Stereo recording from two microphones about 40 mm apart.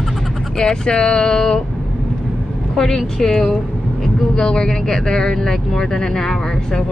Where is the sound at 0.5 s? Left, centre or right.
Centre.